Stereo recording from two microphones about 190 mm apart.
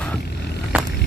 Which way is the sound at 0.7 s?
10° right (ahead or behind).